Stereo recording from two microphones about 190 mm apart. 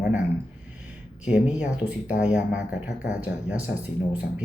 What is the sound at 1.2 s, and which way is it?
Speech, 5° right (ahead or behind).